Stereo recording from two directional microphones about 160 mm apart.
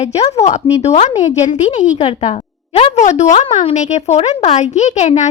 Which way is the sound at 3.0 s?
45° left (ahead or behind).